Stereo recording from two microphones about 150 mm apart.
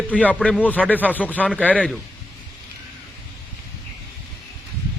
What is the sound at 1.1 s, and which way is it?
Speech, 10° left (ahead or behind).